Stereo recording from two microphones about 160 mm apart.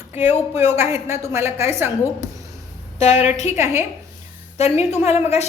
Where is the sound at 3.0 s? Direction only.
40° left (ahead or behind).